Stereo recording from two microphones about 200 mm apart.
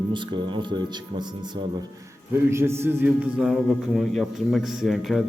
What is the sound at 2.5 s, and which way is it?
A man's voice, 10° right (ahead or behind).